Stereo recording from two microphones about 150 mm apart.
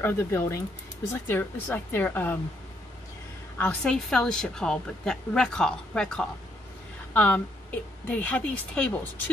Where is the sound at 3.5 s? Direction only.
10° left (ahead or behind).